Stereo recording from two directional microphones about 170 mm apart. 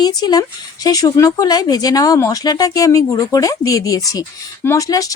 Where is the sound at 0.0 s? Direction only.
25° left (ahead or behind).